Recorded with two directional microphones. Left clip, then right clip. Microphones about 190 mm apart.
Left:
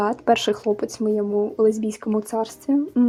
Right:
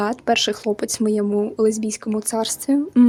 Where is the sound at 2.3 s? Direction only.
50° right (ahead or behind).